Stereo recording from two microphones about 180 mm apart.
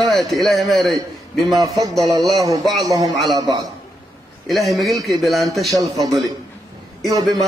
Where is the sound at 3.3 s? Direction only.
20° right (ahead or behind).